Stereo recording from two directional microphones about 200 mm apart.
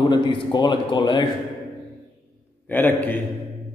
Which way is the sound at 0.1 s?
25° left (ahead or behind).